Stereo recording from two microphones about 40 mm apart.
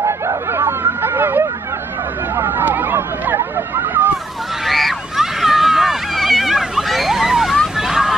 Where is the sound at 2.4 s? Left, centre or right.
Right.